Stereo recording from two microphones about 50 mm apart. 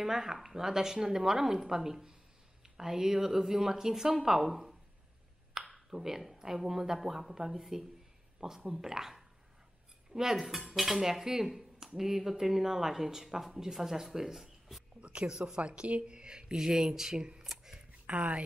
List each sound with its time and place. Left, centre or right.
0.0 s speech: centre
10.8 s cutlery: centre
12.0 s speech: centre
15.0 s speech: right
17.5 s a sound: centre
18.0 s speech: right